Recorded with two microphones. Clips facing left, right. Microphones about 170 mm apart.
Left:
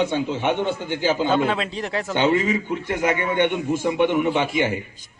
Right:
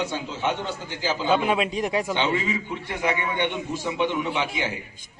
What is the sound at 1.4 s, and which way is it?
Speech, 15° right (ahead or behind).